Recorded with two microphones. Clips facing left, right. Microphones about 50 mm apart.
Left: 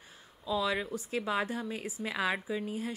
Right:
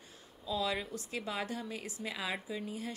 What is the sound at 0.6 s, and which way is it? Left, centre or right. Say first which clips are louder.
A woman's voice: left 2 dB; left.